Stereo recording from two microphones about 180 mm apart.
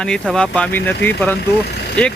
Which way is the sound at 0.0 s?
5° left (ahead or behind).